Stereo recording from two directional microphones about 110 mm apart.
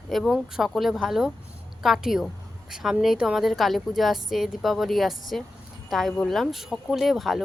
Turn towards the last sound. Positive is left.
turn(degrees=0)  # may be behind; listen again after turning